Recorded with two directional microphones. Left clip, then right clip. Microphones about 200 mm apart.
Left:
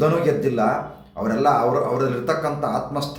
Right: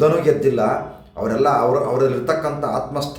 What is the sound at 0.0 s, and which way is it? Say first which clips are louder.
A man's voice: right 4 dB; 10° right (ahead or behind).